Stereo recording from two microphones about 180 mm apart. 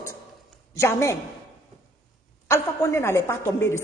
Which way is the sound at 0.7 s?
15° left (ahead or behind).